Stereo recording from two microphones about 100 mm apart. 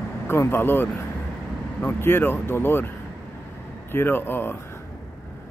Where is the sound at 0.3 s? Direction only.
25° left (ahead or behind).